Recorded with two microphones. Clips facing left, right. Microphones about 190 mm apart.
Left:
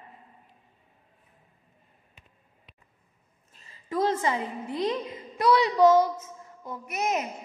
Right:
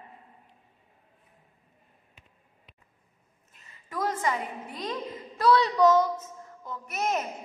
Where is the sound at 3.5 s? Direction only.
30° left (ahead or behind); by 7.3 s 15° left (ahead or behind).